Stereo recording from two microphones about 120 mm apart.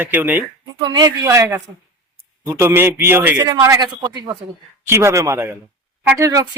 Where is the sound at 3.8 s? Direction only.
35° right (ahead or behind).